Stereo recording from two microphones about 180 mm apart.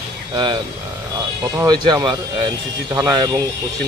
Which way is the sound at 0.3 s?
25° right (ahead or behind).